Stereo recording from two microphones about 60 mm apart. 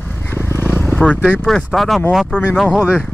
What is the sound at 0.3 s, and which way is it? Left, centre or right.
Vehicle, left.